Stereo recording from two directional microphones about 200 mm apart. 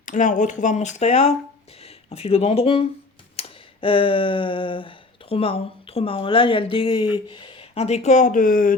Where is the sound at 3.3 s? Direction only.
30° left (ahead or behind).